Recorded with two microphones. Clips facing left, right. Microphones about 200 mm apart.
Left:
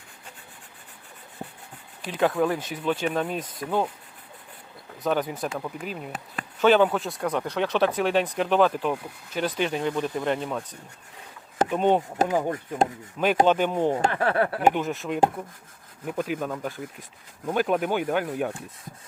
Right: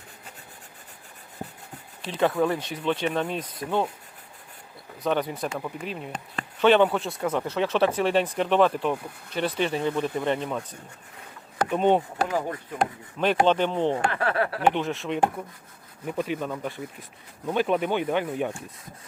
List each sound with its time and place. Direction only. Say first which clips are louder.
2.0 s speech: even; centre (ahead or behind)
5.0 s speech: even; centre (ahead or behind)
11.7 s speech: right 1 dB; centre (ahead or behind)
12.2 s speech: left 3 dB; 20° left (ahead or behind)
13.4 s speech: left 1 dB; 10° left (ahead or behind)
14.0 s speech: left 2 dB; 25° left (ahead or behind)
14.7 s speech: even; centre (ahead or behind)